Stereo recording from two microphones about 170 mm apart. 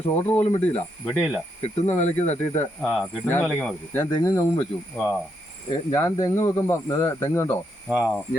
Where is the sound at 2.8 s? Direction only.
5° right (ahead or behind).